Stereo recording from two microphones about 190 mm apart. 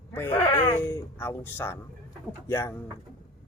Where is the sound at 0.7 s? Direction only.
15° left (ahead or behind).